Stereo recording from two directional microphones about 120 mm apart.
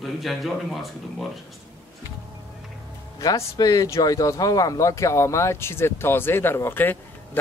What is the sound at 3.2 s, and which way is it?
Speech, 30° left (ahead or behind).